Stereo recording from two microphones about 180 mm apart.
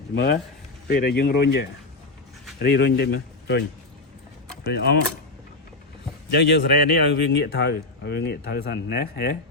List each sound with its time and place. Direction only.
0.1 s speech: 65° left (ahead or behind)
4.7 s speech: 65° left (ahead or behind)
6.3 s speech: 70° left (ahead or behind)